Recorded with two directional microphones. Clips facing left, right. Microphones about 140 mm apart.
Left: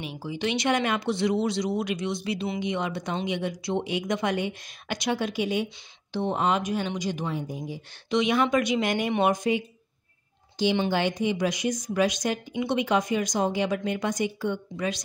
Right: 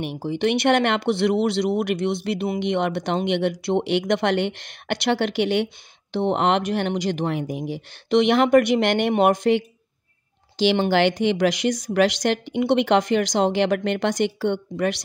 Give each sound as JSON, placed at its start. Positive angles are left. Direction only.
{"t": 0.0, "sound": "speech", "side_deg": -65}
{"t": 2.6, "sound": "speech", "side_deg": -70}
{"t": 10.9, "sound": "speech", "side_deg": -80}